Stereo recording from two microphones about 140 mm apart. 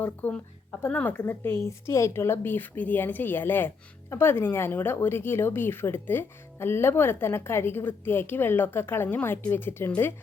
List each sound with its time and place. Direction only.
0.0 s speech: 10° left (ahead or behind)